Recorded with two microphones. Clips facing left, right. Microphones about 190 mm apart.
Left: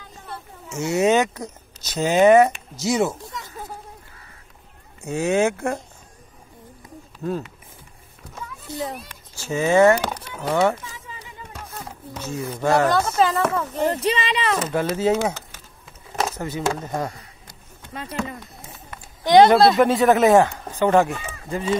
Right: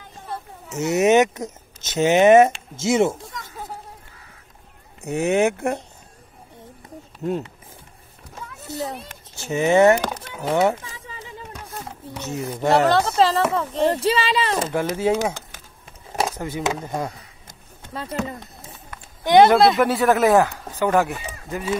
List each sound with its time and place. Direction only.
0.7 s speech: 20° right (ahead or behind)
5.0 s speech: 20° right (ahead or behind)
7.2 s speech: 25° right (ahead or behind)
8.7 s speech: 40° right (ahead or behind)
9.4 s speech: 20° right (ahead or behind)
12.2 s speech: 15° right (ahead or behind)
12.8 s speech: 30° right (ahead or behind)
14.7 s speech: 10° right (ahead or behind)
15.2 s a sound: 10° right (ahead or behind)
16.2 s speech: 15° right (ahead or behind)
17.5 s a sound: 45° right (ahead or behind)
19.4 s speech: 20° left (ahead or behind)